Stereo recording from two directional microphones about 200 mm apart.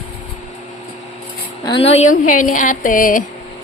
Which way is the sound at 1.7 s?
30° left (ahead or behind).